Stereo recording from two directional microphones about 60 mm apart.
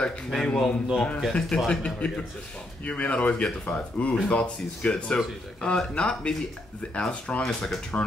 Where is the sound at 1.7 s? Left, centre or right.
Centre.